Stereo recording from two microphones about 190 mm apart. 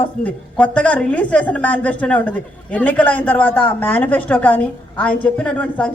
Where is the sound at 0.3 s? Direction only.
5° left (ahead or behind).